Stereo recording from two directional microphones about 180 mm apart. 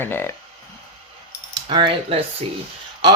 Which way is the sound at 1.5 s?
25° right (ahead or behind).